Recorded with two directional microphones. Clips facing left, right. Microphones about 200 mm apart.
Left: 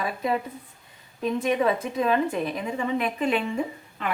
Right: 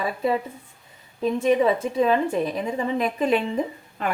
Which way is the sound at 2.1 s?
35° right (ahead or behind).